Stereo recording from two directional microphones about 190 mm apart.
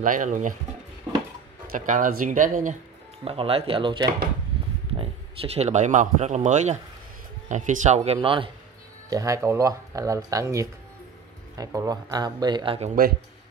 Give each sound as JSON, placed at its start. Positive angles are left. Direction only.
{"t": 0.0, "sound": "speech", "side_deg": -45}
{"t": 1.7, "sound": "speech", "side_deg": -45}
{"t": 3.3, "sound": "speech", "side_deg": -30}
{"t": 9.1, "sound": "speech", "side_deg": -15}